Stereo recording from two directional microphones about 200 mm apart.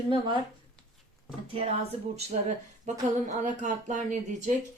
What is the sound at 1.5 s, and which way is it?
Speech, 25° right (ahead or behind).